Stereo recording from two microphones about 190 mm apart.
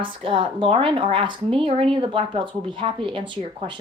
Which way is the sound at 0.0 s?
25° right (ahead or behind).